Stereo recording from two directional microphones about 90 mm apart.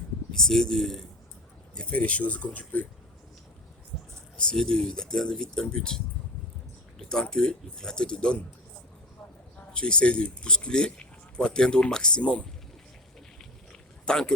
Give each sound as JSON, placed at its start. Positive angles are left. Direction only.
{"t": 0.3, "sound": "speech", "side_deg": 5}
{"t": 3.9, "sound": "a sound", "side_deg": 5}
{"t": 4.4, "sound": "speech", "side_deg": 10}
{"t": 7.0, "sound": "speech", "side_deg": 10}
{"t": 9.7, "sound": "speech", "side_deg": 10}
{"t": 14.0, "sound": "speech", "side_deg": 10}